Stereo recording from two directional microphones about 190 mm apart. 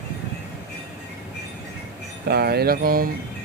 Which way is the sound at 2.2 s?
55° right (ahead or behind).